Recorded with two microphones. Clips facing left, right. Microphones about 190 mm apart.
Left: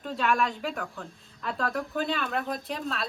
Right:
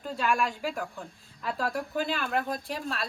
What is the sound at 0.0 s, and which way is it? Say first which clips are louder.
Speech: left 1 dB; centre (ahead or behind).